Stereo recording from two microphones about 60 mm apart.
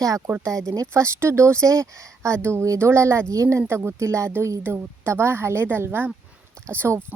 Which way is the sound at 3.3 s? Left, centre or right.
Right.